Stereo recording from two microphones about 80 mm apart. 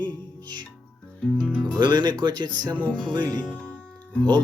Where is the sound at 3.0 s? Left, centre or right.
Right.